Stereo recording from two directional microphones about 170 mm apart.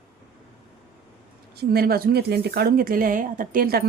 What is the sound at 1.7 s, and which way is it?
Speech, 65° right (ahead or behind).